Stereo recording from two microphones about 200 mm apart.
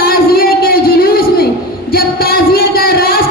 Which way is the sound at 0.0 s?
50° left (ahead or behind).